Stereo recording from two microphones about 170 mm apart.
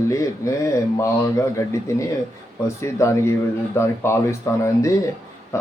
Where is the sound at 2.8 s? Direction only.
15° left (ahead or behind).